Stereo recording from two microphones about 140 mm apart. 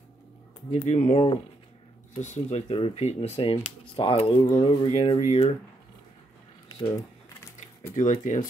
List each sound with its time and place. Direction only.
0.7 s speech: 55° left (ahead or behind)
7.9 s speech: 65° left (ahead or behind)